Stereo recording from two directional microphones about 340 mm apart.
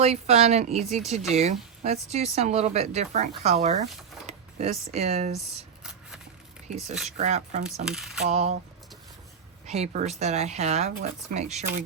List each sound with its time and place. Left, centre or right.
0.0 s speech: centre
4.3 s a sound: centre
4.9 s speech: centre
5.8 s shuffling cards: centre
7.2 s speech: centre
9.6 s speech: centre